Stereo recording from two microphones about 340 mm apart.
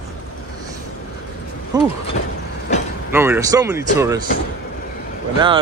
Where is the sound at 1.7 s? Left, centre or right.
Centre.